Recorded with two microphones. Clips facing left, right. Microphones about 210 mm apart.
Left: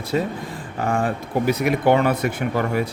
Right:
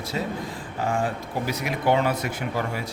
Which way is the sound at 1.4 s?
55° left (ahead or behind).